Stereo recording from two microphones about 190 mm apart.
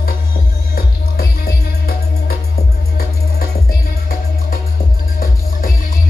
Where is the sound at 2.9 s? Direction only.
55° left (ahead or behind).